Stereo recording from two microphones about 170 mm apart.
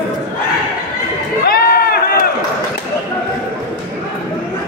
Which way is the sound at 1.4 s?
60° left (ahead or behind).